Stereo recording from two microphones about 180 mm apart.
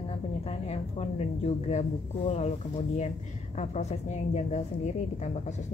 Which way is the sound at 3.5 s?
40° left (ahead or behind).